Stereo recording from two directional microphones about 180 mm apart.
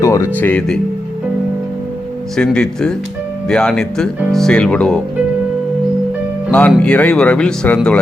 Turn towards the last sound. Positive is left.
turn(degrees=5)  # may be behind; listen again after turning